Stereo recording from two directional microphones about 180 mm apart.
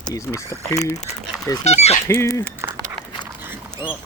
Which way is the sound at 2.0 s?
15° left (ahead or behind).